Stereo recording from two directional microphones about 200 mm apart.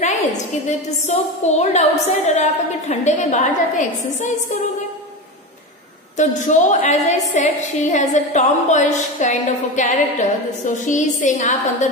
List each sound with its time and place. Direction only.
0.7 s a woman's voice: 35° left (ahead or behind)
6.1 s a woman's voice: 40° left (ahead or behind)